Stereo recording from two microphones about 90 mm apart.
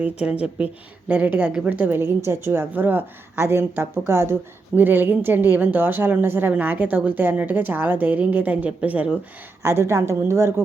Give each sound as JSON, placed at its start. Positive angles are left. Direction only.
{"t": 0.0, "sound": "a woman's voice", "side_deg": -15}
{"t": 9.6, "sound": "a woman's voice", "side_deg": -30}